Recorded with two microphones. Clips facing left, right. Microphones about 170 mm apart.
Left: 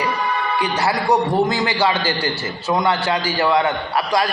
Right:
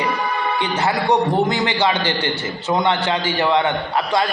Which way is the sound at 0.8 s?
20° right (ahead or behind).